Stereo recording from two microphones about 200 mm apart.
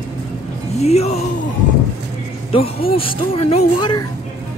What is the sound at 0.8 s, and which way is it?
Speech, 30° left (ahead or behind).